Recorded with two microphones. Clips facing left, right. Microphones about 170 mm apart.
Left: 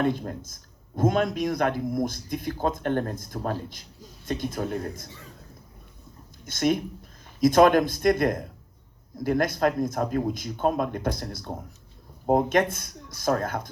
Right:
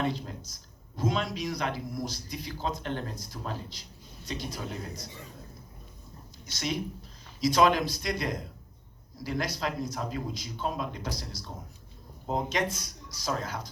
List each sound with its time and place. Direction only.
0.0 s a man's voice: 50° left (ahead or behind)
6.4 s a man's voice: 50° left (ahead or behind)